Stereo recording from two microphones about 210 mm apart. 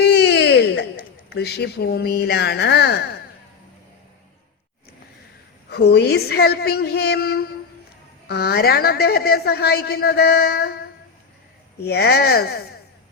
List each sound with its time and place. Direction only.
0.0 s a sound: 55° left (ahead or behind)
5.7 s a woman's voice: 50° left (ahead or behind)
11.9 s a woman's voice: 50° left (ahead or behind)